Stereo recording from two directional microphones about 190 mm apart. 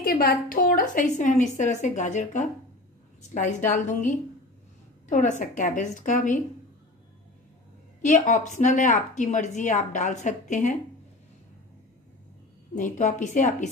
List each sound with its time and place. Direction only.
0.0 s a woman's voice: 50° left (ahead or behind)
8.0 s a woman's voice: 40° left (ahead or behind)
12.7 s a woman's voice: 40° left (ahead or behind)